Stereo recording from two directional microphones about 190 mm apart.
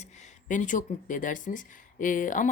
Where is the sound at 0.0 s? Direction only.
40° left (ahead or behind).